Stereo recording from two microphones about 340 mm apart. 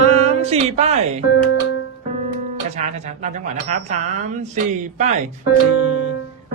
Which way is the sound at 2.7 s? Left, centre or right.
Centre.